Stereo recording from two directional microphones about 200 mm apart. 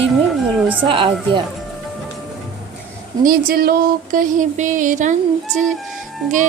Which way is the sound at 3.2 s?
50° right (ahead or behind).